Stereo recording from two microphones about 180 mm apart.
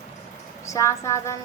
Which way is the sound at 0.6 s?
15° left (ahead or behind).